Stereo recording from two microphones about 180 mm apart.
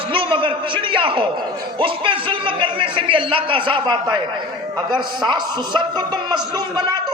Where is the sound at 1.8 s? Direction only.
30° right (ahead or behind).